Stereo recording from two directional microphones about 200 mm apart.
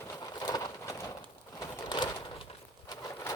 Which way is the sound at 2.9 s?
15° left (ahead or behind).